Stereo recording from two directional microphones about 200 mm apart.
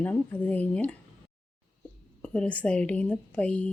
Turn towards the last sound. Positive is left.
turn(degrees=5)  # may be behind; listen again after turning